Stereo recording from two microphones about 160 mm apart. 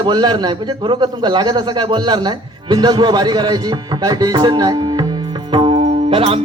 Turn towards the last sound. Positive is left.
turn(degrees=-35)  # may be behind; listen again after turning